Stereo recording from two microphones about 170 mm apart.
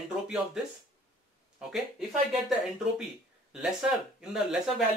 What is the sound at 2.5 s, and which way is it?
Speech, 5° right (ahead or behind).